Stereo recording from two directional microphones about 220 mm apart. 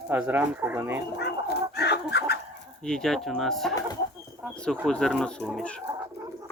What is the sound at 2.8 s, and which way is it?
Speech, centre (ahead or behind).